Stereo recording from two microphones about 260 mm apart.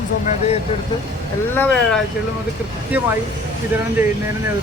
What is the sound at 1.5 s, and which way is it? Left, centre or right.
Speech, centre.